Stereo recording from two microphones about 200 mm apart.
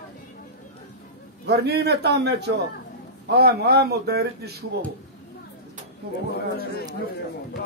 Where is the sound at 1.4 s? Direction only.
55° right (ahead or behind).